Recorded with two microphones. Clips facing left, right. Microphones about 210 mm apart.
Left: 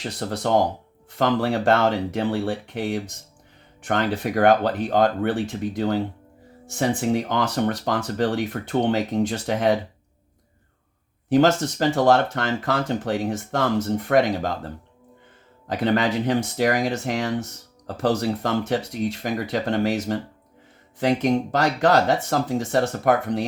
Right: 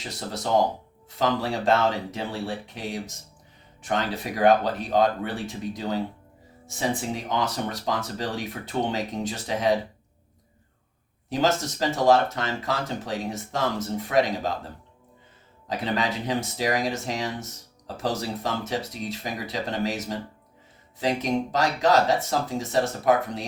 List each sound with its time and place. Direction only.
0.0 s speech: 60° left (ahead or behind)
11.3 s speech: 55° left (ahead or behind)
15.6 s speech: 55° left (ahead or behind)